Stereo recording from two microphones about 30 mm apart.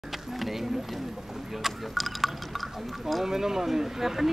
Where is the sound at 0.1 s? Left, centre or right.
Centre.